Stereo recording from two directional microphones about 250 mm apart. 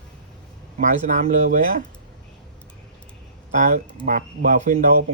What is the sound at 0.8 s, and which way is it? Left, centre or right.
Speech, right.